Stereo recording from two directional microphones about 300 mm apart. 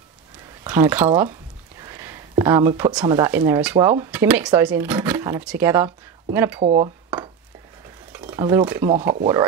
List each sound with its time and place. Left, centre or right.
0.7 s speech: centre
6.6 s dishes: right
8.3 s speech: centre